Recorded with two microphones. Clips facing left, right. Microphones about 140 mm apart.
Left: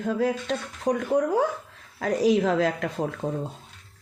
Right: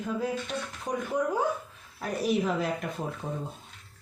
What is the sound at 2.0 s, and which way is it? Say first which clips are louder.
A woman's voice: left 6 dB; 90° left.